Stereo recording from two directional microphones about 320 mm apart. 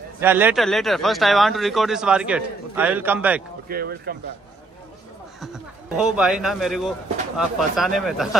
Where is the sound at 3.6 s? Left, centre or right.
Right.